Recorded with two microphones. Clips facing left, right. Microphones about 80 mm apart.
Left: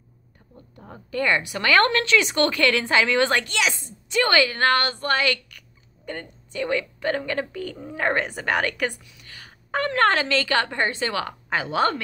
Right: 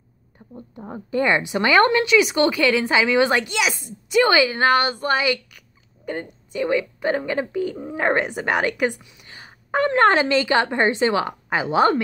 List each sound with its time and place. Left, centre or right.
0.6 s a woman's voice: right